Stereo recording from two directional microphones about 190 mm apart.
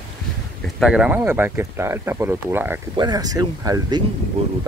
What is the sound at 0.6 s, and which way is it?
Speech, 5° right (ahead or behind).